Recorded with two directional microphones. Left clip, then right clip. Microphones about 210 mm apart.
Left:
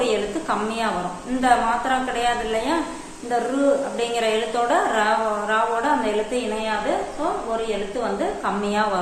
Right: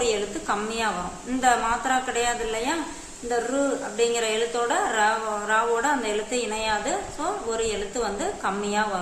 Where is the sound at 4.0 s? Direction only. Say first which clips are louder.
Left 1 dB; 20° right (ahead or behind).